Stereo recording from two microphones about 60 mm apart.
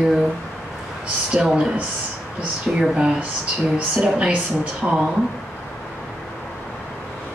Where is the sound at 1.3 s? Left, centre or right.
Centre.